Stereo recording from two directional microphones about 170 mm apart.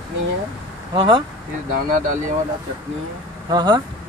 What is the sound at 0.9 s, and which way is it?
Speech, 25° right (ahead or behind).